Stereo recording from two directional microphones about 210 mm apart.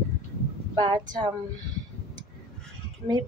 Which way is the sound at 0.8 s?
20° right (ahead or behind).